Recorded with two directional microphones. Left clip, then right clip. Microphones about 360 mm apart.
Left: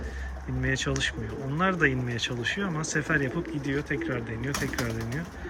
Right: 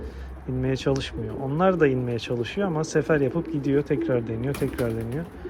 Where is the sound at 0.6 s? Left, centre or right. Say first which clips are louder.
Right 2 dB; centre.